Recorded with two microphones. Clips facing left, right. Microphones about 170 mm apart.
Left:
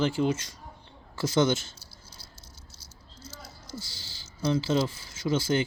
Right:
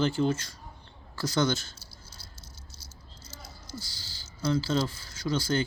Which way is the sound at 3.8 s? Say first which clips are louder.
Left 1 dB; 20° left (ahead or behind).